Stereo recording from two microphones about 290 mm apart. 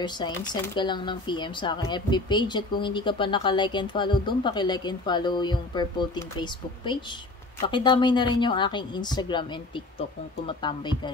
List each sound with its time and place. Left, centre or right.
0.0 s speech: centre